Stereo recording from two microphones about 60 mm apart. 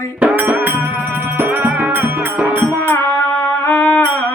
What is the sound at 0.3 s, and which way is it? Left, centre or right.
Music, right.